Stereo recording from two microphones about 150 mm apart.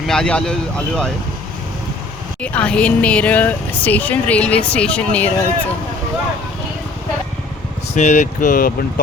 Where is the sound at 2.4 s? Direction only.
10° left (ahead or behind).